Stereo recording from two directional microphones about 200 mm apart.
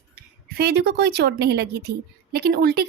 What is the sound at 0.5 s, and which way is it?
A woman's voice, 55° right (ahead or behind).